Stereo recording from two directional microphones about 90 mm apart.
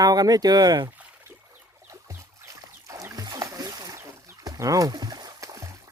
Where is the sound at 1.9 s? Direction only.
35° right (ahead or behind).